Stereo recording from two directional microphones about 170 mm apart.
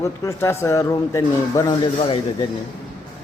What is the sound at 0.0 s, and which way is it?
A man's voice, 15° left (ahead or behind).